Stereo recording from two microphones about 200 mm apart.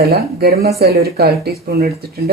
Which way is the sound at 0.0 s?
50° right (ahead or behind).